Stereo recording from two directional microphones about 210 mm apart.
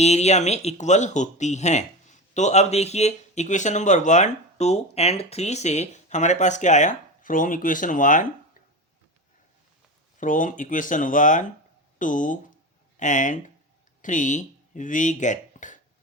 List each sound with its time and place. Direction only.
0.0 s speech: 30° left (ahead or behind)
10.2 s speech: 40° left (ahead or behind)